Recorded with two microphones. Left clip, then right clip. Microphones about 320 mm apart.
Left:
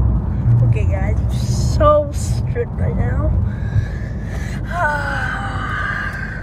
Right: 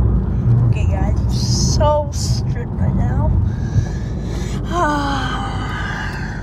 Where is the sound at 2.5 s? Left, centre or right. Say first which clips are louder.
Left 3 dB; centre.